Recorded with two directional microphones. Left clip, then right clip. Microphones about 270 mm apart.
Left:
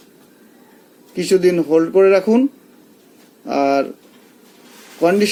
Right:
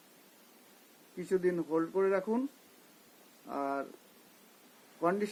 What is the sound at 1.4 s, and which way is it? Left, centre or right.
Speech, centre.